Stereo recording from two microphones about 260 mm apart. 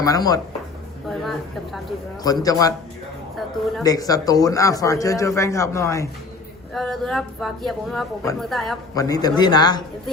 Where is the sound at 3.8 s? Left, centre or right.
Centre.